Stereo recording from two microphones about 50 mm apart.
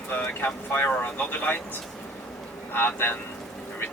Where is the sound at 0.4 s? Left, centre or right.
Left.